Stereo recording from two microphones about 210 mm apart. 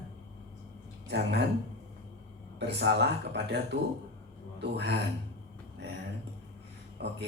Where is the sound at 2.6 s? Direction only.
55° right (ahead or behind).